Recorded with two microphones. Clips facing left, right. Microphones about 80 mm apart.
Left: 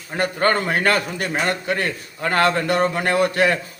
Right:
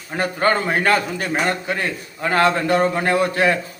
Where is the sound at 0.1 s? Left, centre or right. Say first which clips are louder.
Even; centre.